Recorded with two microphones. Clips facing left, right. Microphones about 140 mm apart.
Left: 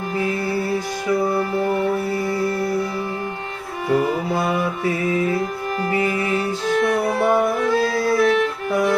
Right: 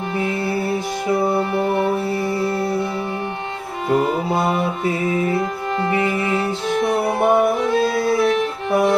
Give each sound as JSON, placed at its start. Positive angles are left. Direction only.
{"t": 0.2, "sound": "music", "side_deg": -25}
{"t": 3.8, "sound": "music", "side_deg": -25}